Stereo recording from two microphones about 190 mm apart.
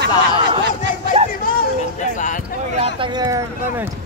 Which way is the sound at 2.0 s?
40° left (ahead or behind).